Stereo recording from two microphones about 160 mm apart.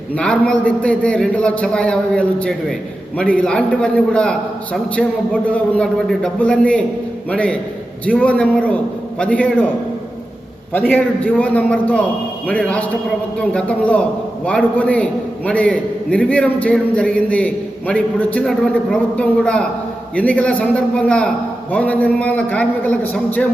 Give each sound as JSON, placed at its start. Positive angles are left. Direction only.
{"t": 0.2, "sound": "a man's voice", "side_deg": 5}
{"t": 10.7, "sound": "a man's voice", "side_deg": 10}